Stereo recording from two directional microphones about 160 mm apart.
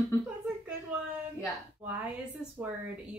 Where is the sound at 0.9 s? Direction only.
10° right (ahead or behind).